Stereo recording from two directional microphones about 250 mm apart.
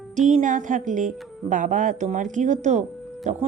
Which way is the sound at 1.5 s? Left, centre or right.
Right.